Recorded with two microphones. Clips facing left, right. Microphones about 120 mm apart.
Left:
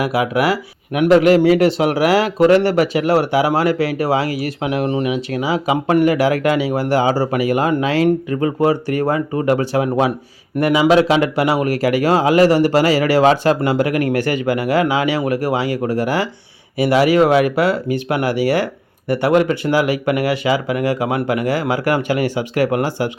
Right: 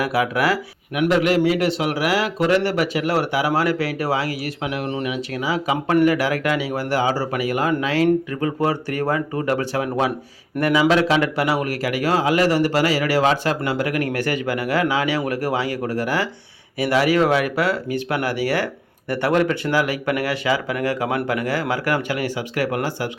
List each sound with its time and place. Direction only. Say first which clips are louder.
0.0 s speech: left 3 dB; 15° left (ahead or behind)
0.9 s speech: left 6 dB; 30° left (ahead or behind)